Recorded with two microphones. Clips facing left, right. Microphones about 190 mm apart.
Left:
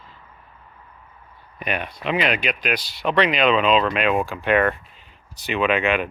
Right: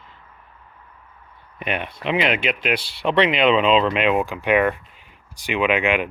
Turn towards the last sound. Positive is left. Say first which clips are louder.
# right 1 dB
turn(degrees=-15)  # may be behind; listen again after turning